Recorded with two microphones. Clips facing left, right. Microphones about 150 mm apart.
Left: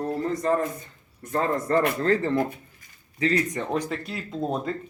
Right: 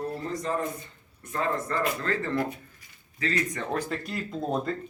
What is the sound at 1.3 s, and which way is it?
Speech, 40° left (ahead or behind).